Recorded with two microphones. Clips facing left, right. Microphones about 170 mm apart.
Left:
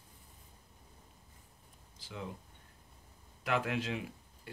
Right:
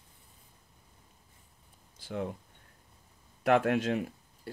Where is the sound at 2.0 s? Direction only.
50° right (ahead or behind).